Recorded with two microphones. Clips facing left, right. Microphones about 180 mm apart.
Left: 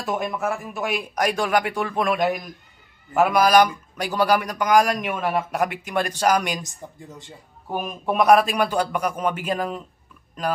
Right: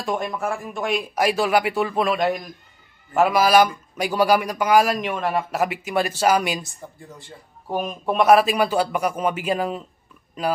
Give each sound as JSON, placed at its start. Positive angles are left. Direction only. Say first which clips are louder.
{"t": 0.0, "sound": "a man's voice", "louder": "even", "side_deg": 0}
{"t": 6.6, "sound": "speech", "louder": "left 1 dB", "side_deg": 20}
{"t": 7.6, "sound": "a man's voice", "louder": "right 2 dB", "side_deg": 0}